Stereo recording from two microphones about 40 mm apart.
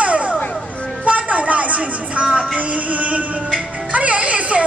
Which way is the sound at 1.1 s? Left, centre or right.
Right.